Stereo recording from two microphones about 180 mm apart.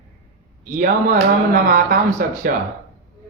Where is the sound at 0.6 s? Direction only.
50° right (ahead or behind).